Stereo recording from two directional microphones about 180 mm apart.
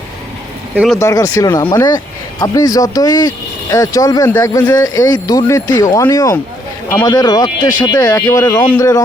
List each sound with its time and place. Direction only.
0.9 s speech: 20° left (ahead or behind)